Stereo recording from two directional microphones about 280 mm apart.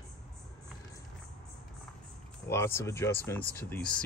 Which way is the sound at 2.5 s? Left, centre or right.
Centre.